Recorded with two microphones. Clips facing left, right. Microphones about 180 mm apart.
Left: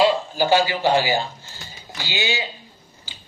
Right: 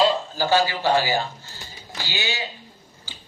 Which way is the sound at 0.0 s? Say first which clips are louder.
Left 2 dB; 15° left (ahead or behind).